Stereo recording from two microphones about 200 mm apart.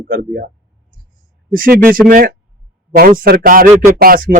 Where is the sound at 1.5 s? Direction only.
45° right (ahead or behind).